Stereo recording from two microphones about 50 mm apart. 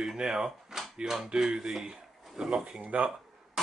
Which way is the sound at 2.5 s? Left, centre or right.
Right.